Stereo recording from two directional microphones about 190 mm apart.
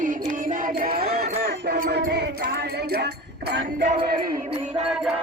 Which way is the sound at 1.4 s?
60° right (ahead or behind).